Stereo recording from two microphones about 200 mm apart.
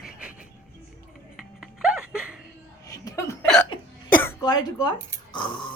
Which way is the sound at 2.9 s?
15° left (ahead or behind).